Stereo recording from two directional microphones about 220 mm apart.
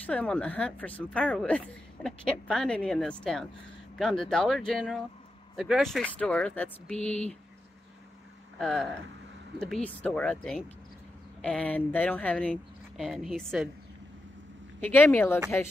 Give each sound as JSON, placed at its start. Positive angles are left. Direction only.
{"t": 0.0, "sound": "speech", "side_deg": 5}
{"t": 8.5, "sound": "speech", "side_deg": 5}
{"t": 9.8, "sound": "speech", "side_deg": 5}
{"t": 14.8, "sound": "speech", "side_deg": 10}